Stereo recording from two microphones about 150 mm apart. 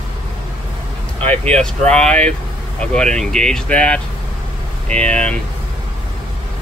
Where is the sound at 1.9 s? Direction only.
10° left (ahead or behind).